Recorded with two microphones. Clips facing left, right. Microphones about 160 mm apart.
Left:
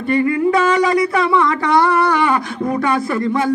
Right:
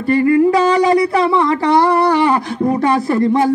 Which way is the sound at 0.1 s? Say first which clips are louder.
Right 4 dB; 35° right (ahead or behind).